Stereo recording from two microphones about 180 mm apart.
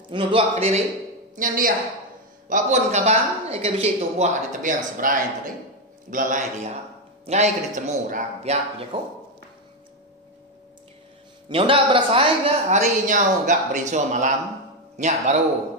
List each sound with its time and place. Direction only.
0.1 s a woman's voice: 30° right (ahead or behind)
1.3 s a woman's voice: 50° right (ahead or behind)
11.4 s a woman's voice: 30° right (ahead or behind)